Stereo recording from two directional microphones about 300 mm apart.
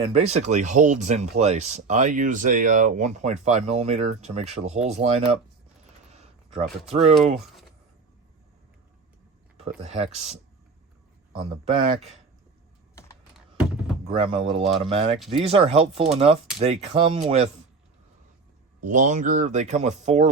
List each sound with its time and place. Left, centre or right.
0.0 s speech: right
6.1 s a sound: right
9.6 s speech: right
14.2 s speech: centre
18.8 s speech: right